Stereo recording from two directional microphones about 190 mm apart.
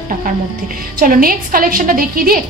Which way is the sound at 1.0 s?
50° right (ahead or behind).